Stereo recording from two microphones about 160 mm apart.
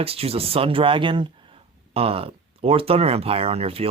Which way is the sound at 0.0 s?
40° right (ahead or behind).